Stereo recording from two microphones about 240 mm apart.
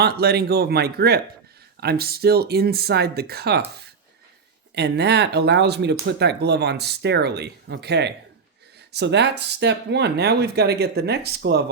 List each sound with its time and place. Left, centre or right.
0.0 s speech: right
4.7 s speech: right